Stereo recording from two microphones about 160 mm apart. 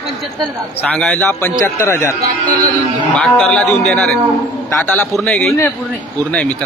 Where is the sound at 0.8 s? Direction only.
5° left (ahead or behind).